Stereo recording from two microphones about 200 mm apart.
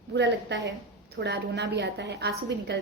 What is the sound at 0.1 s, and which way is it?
A woman's voice, 60° right (ahead or behind).